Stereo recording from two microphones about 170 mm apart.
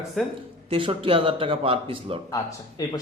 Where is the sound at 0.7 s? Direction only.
30° right (ahead or behind).